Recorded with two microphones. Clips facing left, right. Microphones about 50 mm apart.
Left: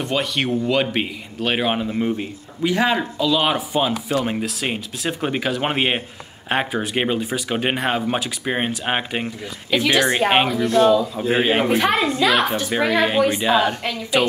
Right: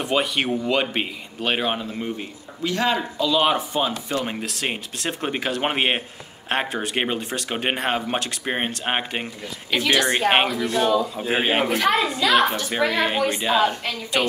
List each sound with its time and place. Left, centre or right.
0.0 s speech: centre
1.7 s a man's voice: centre
3.2 s speech: centre
9.8 s a man's voice: centre
10.1 s speech: centre
11.8 s a child's voice: left
12.9 s speech: centre